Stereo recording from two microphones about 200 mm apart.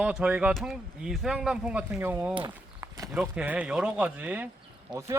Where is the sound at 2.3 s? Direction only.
20° right (ahead or behind).